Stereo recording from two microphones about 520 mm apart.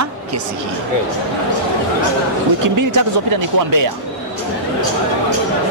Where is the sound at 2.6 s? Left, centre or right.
Right.